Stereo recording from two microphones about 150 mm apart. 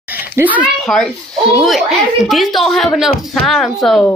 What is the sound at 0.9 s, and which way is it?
Speech, centre (ahead or behind).